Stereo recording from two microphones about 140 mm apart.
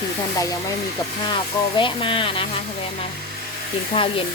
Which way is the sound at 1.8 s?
35° left (ahead or behind).